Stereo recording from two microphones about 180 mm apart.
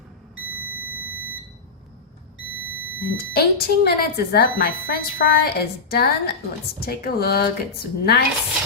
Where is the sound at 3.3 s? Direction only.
60° left (ahead or behind).